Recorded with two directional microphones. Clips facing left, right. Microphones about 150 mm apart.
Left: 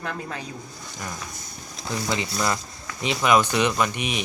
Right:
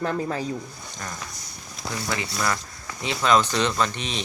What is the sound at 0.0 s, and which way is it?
Speech, 35° right (ahead or behind).